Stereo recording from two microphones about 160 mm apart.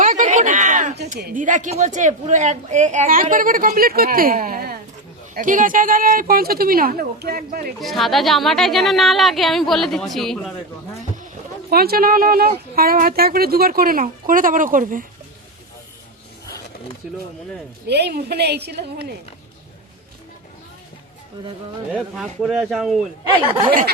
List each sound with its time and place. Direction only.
0.0 s a sound: 50° right (ahead or behind)
1.2 s a woman's voice: 55° right (ahead or behind)
5.3 s a woman's voice: 55° right (ahead or behind)
7.8 s speech: centre (ahead or behind)
11.7 s a woman's voice: 70° right (ahead or behind)
17.8 s a woman's voice: 90° right
21.9 s speech: centre (ahead or behind)
23.5 s speech: 30° right (ahead or behind)